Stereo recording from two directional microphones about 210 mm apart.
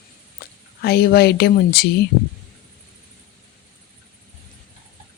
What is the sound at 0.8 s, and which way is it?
Speech, 50° left (ahead or behind).